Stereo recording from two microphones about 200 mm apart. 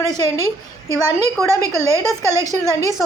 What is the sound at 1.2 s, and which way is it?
Speech, 15° right (ahead or behind).